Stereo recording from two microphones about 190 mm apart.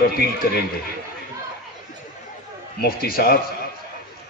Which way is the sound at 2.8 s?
50° left (ahead or behind).